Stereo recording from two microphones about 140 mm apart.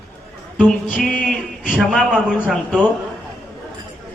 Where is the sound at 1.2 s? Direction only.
75° left (ahead or behind).